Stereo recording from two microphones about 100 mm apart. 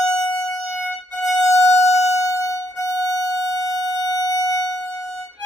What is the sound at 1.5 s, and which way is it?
Music, 25° left (ahead or behind).